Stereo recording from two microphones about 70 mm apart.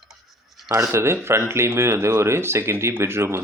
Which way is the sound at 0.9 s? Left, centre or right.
Right.